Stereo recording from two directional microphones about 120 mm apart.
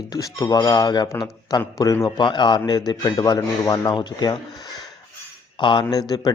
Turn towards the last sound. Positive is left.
turn(degrees=35)  # may be behind; listen again after turning